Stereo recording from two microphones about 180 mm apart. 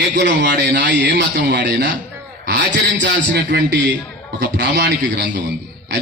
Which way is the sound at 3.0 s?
75° right (ahead or behind).